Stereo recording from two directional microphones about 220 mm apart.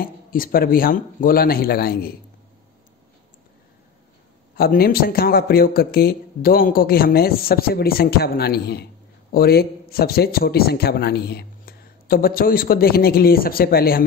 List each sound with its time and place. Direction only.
0.0 s speech: 40° left (ahead or behind)
4.6 s a man's voice: 45° left (ahead or behind)